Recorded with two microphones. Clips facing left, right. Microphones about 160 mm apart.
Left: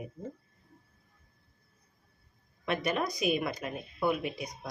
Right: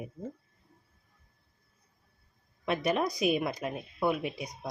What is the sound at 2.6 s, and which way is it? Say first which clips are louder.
Speech: right 2 dB; 35° right (ahead or behind).